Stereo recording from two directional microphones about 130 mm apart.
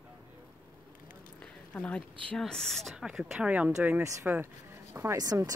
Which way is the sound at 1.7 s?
10° left (ahead or behind).